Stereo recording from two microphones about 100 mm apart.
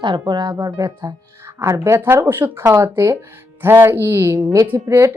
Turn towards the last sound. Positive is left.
turn(degrees=-30)  # may be behind; listen again after turning